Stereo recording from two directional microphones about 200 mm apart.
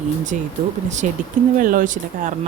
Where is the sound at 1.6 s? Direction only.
45° right (ahead or behind).